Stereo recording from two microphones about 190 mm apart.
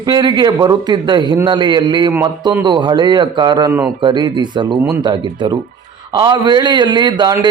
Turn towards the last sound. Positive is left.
turn(degrees=-20)  # may be behind; listen again after turning